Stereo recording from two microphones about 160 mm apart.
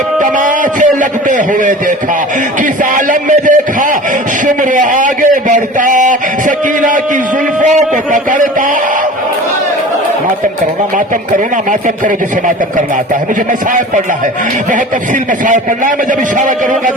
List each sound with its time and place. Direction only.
0.2 s a man's voice: 55° right (ahead or behind)
15.4 s a man's voice: 55° right (ahead or behind)